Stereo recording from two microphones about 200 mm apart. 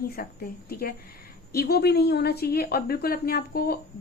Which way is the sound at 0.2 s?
45° left (ahead or behind).